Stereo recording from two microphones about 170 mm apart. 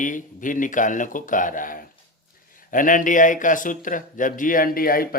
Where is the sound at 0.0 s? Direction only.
50° left (ahead or behind).